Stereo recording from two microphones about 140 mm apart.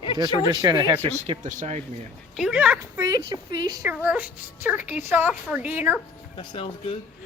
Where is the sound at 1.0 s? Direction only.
45° right (ahead or behind).